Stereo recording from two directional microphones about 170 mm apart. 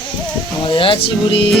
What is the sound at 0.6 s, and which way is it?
Speech, 30° left (ahead or behind).